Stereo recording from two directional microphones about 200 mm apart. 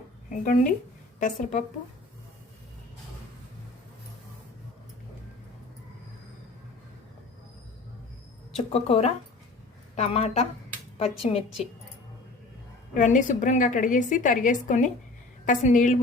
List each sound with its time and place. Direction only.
0.3 s a woman's voice: 40° left (ahead or behind)
8.5 s a woman's voice: 30° left (ahead or behind)
12.9 s a woman's voice: 40° left (ahead or behind)